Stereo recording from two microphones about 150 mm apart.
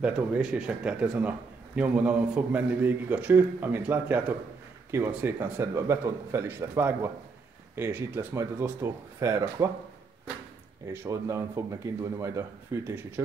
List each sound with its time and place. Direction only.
0.0 s a man's voice: 5° right (ahead or behind)
10.9 s speech: 20° right (ahead or behind)